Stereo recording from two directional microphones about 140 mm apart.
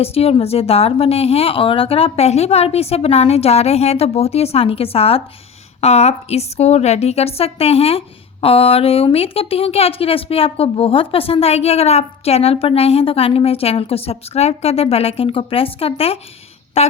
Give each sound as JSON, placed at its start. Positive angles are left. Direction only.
{"t": 0.0, "sound": "a woman's voice", "side_deg": 45}